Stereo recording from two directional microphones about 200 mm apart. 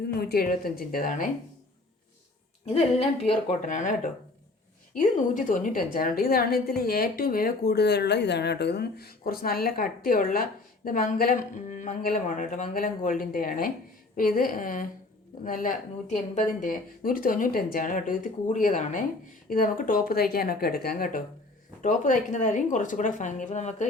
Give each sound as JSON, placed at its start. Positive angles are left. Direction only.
{"t": 0.2, "sound": "a woman's voice", "side_deg": 50}
{"t": 2.6, "sound": "a woman's voice", "side_deg": 30}